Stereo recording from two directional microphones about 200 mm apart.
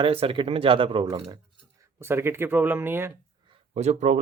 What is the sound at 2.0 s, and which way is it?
Speech, 10° right (ahead or behind).